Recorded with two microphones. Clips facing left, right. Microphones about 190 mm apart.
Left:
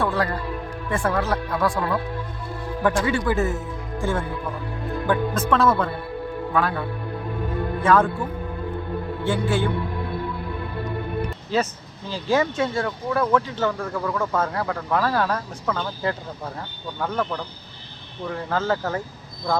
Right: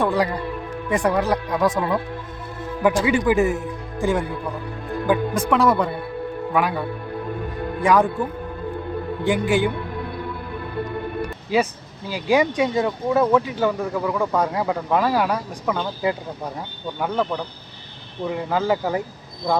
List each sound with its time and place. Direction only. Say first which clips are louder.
0.0 s a man's voice: right 3 dB; 15° right (ahead or behind)
9.2 s speech: right 3 dB; 15° right (ahead or behind)
11.2 s speech: right 3 dB; 10° right (ahead or behind)